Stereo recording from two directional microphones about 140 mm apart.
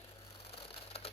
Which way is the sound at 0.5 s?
45° left (ahead or behind).